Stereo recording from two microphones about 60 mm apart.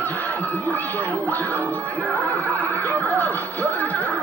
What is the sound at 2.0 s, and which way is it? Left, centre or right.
Music, left.